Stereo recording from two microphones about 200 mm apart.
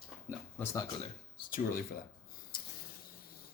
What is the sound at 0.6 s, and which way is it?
Speech, 15° left (ahead or behind).